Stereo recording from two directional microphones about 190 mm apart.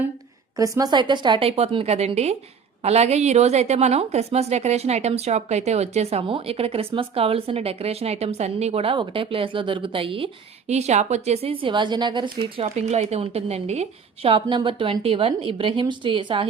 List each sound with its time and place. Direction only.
0.5 s a woman's voice: 20° right (ahead or behind)